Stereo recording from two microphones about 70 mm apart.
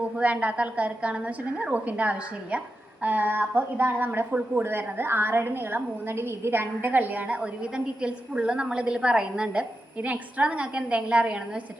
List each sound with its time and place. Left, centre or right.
0.2 s a woman's voice: centre